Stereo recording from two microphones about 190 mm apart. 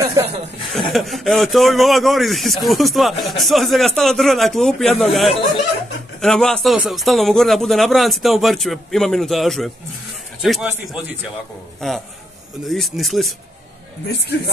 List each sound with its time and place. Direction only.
0.0 s chuckle: 15° right (ahead or behind)
0.7 s speech: centre (ahead or behind)